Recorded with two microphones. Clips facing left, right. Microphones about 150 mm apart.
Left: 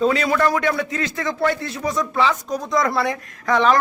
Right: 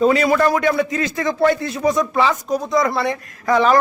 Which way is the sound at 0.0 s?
10° right (ahead or behind).